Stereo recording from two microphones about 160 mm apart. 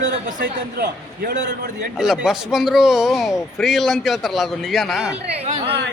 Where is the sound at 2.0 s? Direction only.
Centre (ahead or behind).